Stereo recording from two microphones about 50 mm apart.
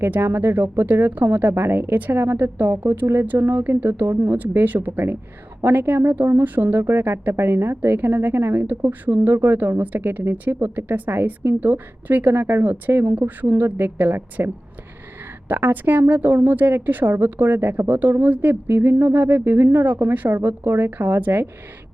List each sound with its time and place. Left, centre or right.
0.2 s speech: right
8.6 s speech: right